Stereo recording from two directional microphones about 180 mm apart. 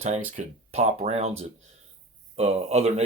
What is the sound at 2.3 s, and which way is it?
Speech, 35° right (ahead or behind).